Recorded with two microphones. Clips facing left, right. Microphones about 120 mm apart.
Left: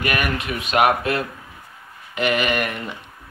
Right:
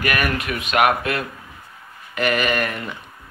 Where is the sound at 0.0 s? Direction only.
25° left (ahead or behind).